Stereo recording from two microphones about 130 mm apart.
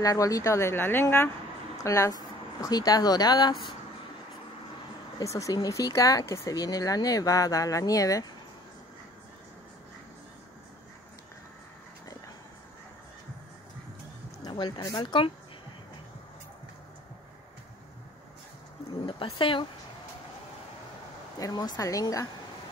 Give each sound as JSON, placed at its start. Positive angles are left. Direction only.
{"t": 0.0, "sound": "speech", "side_deg": 25}
{"t": 5.2, "sound": "speech", "side_deg": 25}
{"t": 14.4, "sound": "speech", "side_deg": 30}
{"t": 19.0, "sound": "speech", "side_deg": 40}
{"t": 21.4, "sound": "speech", "side_deg": 25}